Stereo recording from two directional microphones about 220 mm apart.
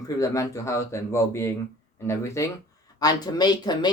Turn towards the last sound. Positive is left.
turn(degrees=20)  # may be behind; listen again after turning